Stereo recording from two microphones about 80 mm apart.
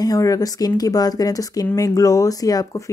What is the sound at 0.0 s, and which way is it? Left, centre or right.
Speech, left.